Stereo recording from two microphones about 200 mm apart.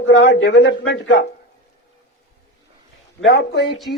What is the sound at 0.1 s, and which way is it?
A man's voice, 65° left (ahead or behind).